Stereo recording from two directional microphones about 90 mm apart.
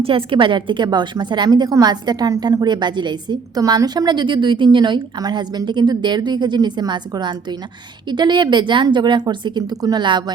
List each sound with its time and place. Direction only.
0.0 s a woman's voice: 80° right; by 3.6 s 55° right (ahead or behind)
3.6 s a woman's voice: 45° right (ahead or behind)